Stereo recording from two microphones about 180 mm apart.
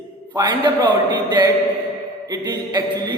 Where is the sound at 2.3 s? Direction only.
25° right (ahead or behind).